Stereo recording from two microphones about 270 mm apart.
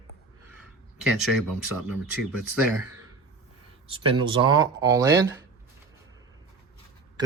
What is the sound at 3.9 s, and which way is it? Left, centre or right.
Speech, centre.